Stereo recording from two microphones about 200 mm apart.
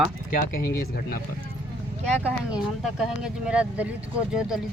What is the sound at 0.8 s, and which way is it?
Speech, 45° left (ahead or behind).